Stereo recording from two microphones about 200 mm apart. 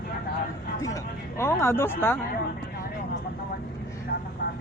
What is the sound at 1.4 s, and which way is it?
Speech, 10° left (ahead or behind).